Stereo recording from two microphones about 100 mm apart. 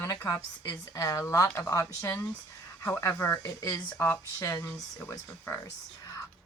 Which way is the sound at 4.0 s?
30° left (ahead or behind).